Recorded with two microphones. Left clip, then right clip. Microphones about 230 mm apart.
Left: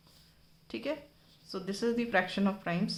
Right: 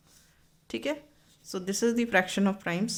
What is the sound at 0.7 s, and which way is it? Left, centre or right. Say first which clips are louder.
Speech: right 4 dB; right.